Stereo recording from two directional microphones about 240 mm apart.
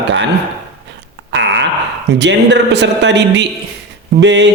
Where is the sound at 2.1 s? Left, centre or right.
Right.